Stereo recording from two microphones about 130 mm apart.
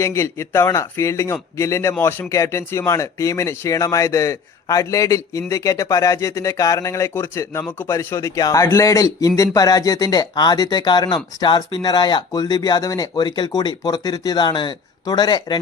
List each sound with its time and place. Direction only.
0.0 s a man's voice: 20° left (ahead or behind)